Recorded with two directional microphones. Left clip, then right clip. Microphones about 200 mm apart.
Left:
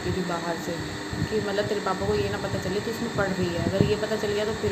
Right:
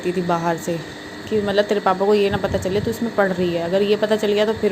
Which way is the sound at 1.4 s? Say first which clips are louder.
Right 11 dB; 35° right (ahead or behind).